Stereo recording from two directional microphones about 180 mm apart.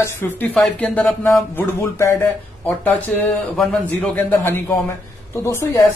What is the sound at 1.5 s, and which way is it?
Speech, 15° left (ahead or behind).